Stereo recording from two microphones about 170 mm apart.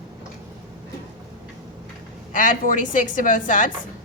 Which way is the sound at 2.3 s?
50° left (ahead or behind).